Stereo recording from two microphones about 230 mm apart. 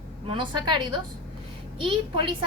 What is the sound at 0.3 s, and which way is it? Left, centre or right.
A woman's voice, right.